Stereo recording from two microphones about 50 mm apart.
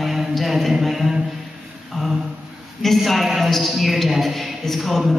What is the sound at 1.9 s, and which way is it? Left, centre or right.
A man's voice, centre.